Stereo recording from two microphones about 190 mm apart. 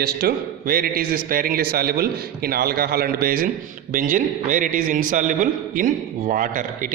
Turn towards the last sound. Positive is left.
turn(degrees=-45)  # may be behind; listen again after turning